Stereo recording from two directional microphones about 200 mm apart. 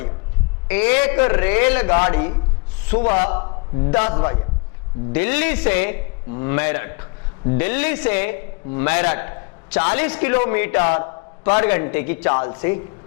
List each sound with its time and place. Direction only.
0.7 s a man's voice: 15° left (ahead or behind)
3.4 s a man's voice: 25° left (ahead or behind)